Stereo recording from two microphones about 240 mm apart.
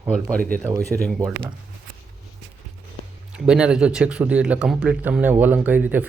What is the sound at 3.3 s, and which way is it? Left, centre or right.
Speech, centre.